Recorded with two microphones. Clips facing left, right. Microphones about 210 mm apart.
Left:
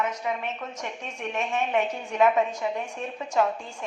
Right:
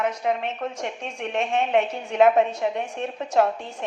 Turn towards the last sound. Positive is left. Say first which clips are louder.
# right 4 dB
turn(degrees=-65)  # may be behind; listen again after turning